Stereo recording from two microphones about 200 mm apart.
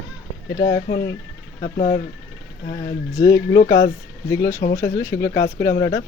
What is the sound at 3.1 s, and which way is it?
Speech, 15° left (ahead or behind).